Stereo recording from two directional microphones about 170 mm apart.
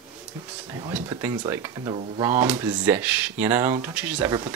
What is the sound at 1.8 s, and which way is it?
Speech, 25° right (ahead or behind).